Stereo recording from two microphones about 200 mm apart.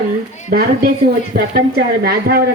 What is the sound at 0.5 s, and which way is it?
Speech, 45° right (ahead or behind).